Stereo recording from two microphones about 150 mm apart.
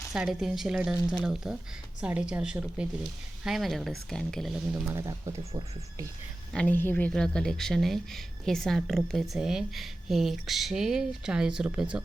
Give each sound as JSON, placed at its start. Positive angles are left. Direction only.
{"t": 0.1, "sound": "a woman's voice", "side_deg": -5}
{"t": 4.9, "sound": "speech", "side_deg": -20}
{"t": 6.5, "sound": "speech", "side_deg": 10}